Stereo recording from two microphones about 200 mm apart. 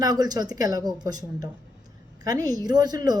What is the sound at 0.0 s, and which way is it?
Speech, 20° right (ahead or behind).